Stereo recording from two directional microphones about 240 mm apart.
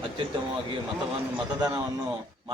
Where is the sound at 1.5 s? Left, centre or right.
Centre.